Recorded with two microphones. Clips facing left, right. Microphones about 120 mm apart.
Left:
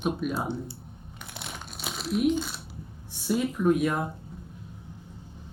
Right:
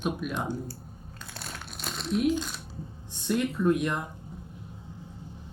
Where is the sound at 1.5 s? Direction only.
5° left (ahead or behind).